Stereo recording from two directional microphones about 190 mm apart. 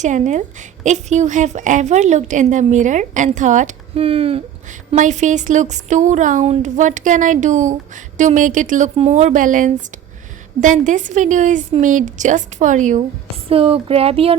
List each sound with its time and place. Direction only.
0.0 s a woman's voice: 40° right (ahead or behind)
13.5 s a woman's voice: 30° right (ahead or behind)